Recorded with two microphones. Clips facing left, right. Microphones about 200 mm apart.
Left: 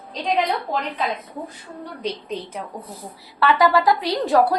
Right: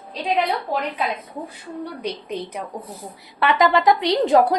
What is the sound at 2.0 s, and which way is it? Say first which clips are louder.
Speech: left 4 dB; 10° right (ahead or behind).